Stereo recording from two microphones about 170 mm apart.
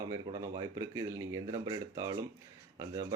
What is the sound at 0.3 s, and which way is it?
Speech, 25° right (ahead or behind).